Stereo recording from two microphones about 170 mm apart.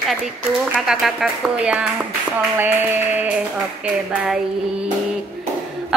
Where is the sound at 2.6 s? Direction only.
10° right (ahead or behind).